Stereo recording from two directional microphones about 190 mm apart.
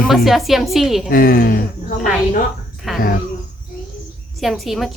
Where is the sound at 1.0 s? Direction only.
50° left (ahead or behind).